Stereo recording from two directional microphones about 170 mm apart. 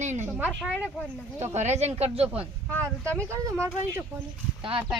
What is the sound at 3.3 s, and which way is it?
Speech, 15° right (ahead or behind).